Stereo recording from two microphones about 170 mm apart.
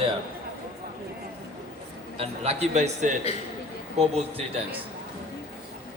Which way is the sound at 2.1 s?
35° right (ahead or behind).